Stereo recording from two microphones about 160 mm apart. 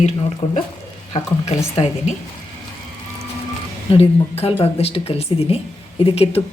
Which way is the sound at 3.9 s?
40° left (ahead or behind).